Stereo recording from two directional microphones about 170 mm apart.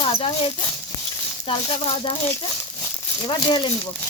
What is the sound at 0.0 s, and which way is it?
A woman's voice, 35° left (ahead or behind).